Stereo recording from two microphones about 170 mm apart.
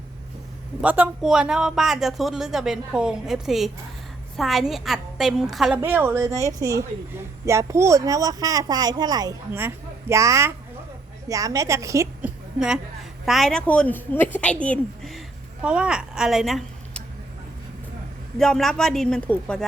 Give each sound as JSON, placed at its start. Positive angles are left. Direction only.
{"t": 0.8, "sound": "a man's voice", "side_deg": -10}
{"t": 5.8, "sound": "a woman's voice", "side_deg": -10}
{"t": 12.5, "sound": "a woman's voice", "side_deg": -5}
{"t": 18.3, "sound": "a man's voice", "side_deg": 5}